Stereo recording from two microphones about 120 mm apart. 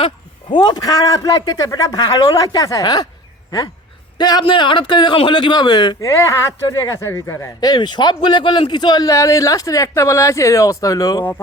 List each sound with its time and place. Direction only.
0.5 s a man's voice: 40° left (ahead or behind)
4.2 s a man's voice: 40° left (ahead or behind)
6.1 s speech: 25° left (ahead or behind)